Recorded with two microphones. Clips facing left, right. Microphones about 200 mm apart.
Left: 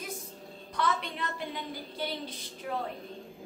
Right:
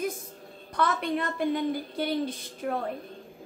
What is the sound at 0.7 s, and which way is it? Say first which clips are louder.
A woman's voice: right 5 dB; 50° right (ahead or behind).